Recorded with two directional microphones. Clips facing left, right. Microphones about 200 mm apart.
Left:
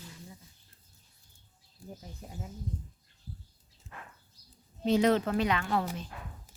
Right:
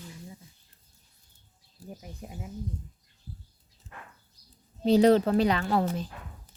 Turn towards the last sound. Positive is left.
turn(degrees=-35)  # may be behind; listen again after turning